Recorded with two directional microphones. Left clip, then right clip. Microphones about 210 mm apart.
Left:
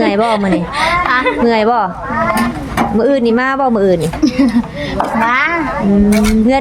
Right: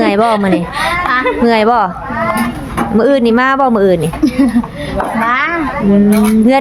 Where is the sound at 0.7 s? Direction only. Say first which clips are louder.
Left 3 dB; 10° left (ahead or behind).